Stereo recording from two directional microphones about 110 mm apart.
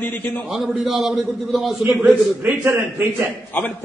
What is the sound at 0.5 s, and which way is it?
A man's voice, 5° right (ahead or behind).